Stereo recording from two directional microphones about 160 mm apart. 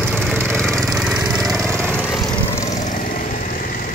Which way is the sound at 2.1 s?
20° left (ahead or behind).